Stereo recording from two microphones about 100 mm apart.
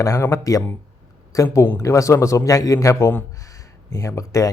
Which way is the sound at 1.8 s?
35° left (ahead or behind).